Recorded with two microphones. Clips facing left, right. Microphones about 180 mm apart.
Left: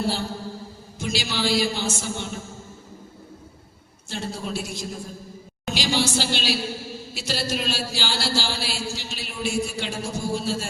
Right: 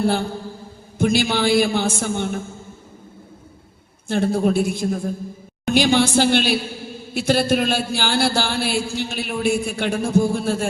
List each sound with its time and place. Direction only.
0.0 s a woman's voice: 55° right (ahead or behind)
4.1 s a woman's voice: 55° right (ahead or behind)